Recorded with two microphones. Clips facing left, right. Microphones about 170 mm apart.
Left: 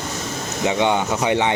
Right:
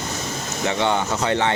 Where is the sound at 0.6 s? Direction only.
15° left (ahead or behind).